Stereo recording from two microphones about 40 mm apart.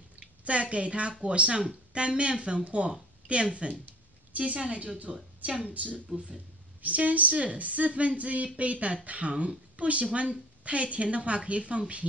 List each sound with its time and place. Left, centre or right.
0.2 s a woman's voice: right